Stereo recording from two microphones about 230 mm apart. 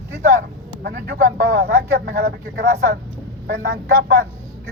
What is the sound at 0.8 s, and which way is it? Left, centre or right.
Speech, right.